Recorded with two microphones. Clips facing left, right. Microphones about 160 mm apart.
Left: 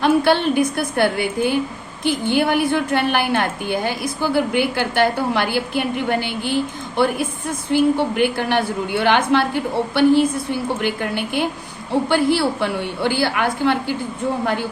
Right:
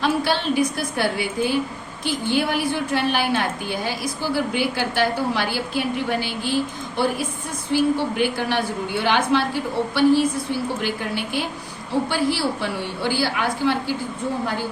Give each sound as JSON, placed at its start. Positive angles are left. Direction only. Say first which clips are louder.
{"t": 0.0, "sound": "a woman's voice", "louder": "left 6 dB", "side_deg": 55}